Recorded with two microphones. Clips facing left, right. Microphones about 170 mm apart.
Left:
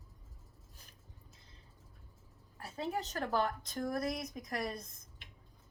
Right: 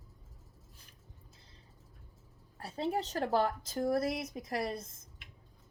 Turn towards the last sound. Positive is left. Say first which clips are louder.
# right 3 dB
turn(degrees=-30)  # may be behind; listen again after turning